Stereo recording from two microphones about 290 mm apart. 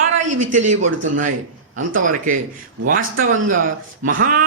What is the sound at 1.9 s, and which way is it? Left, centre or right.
Speech, right.